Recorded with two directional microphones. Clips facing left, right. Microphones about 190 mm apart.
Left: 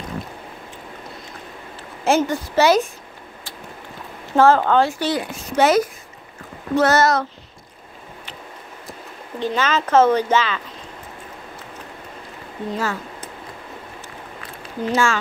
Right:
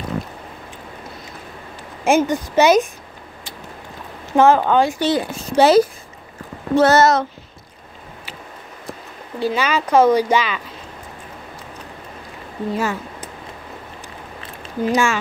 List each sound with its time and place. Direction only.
2.0 s speech: 15° right (ahead or behind)
4.4 s a woman's voice: 15° right (ahead or behind)
9.4 s speech: 10° right (ahead or behind)
12.7 s speech: 15° right (ahead or behind)
14.9 s speech: 15° right (ahead or behind)